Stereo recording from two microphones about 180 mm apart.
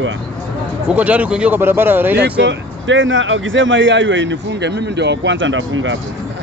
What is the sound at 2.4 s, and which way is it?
Speech, 90° right.